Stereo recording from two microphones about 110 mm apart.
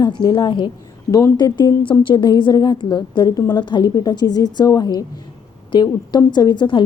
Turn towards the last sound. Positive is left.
turn(degrees=45)  # may be behind; listen again after turning